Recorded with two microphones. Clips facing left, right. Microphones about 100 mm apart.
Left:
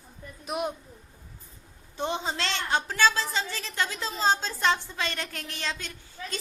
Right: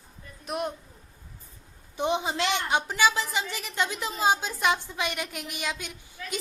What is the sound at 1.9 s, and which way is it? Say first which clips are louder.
A woman's voice: right 3 dB; 15° right (ahead or behind).